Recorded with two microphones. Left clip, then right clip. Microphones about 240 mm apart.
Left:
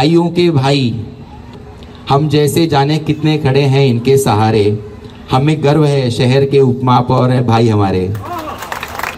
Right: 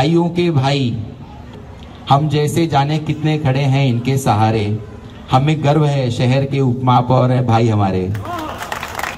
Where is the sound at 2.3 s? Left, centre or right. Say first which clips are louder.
Left 5 dB; centre.